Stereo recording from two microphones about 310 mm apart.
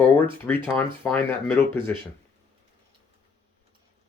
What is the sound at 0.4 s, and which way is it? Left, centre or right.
Speech, centre.